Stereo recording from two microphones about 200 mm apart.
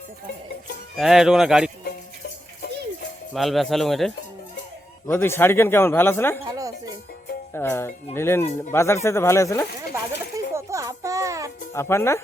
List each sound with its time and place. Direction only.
0.9 s speech: centre (ahead or behind)
3.3 s speech: centre (ahead or behind)
6.4 s music: 15° right (ahead or behind)
7.5 s speech: 10° left (ahead or behind)
9.9 s a sound: 15° right (ahead or behind)
11.7 s speech: 15° left (ahead or behind)